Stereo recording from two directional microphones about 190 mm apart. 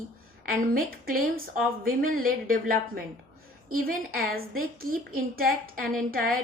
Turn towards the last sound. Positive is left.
turn(degrees=-50)  # may be behind; listen again after turning